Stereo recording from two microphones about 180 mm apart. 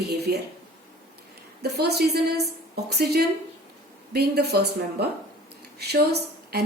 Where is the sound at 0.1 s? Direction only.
60° right (ahead or behind).